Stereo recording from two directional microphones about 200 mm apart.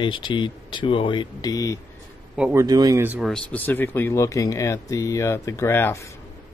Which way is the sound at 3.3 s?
5° left (ahead or behind).